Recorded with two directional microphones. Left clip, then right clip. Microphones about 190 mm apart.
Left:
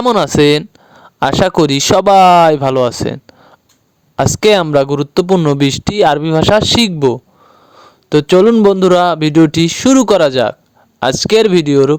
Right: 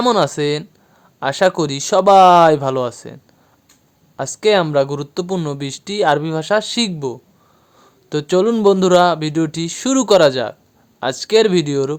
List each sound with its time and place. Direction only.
0.0 s speech: 45° left (ahead or behind)